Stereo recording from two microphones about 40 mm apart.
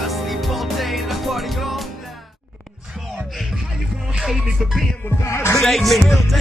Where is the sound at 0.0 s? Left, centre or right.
Centre.